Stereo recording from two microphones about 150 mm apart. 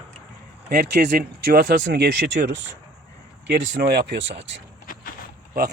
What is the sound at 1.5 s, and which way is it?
Speech, 90° right.